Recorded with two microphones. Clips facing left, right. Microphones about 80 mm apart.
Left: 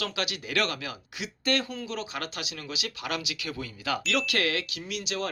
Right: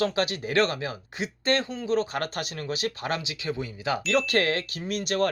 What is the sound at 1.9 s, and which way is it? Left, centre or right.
Speech, right.